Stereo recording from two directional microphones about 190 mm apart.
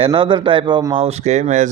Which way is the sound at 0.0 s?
25° right (ahead or behind).